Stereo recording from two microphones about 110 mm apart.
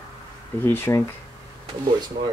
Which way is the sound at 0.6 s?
25° left (ahead or behind).